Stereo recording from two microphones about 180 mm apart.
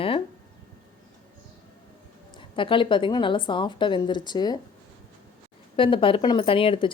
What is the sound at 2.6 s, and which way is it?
A woman's voice, 30° left (ahead or behind).